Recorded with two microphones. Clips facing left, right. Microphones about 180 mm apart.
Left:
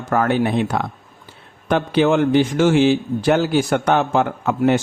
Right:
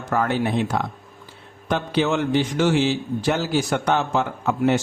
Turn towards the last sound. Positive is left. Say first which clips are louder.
# left 3 dB
turn(degrees=55)  # may be behind; listen again after turning